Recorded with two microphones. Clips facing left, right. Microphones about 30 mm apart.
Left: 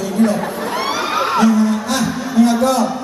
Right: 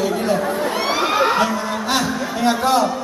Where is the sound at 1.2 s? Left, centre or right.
Right.